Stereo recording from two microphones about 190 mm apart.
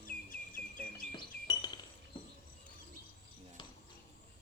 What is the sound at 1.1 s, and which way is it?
Glass, 20° left (ahead or behind).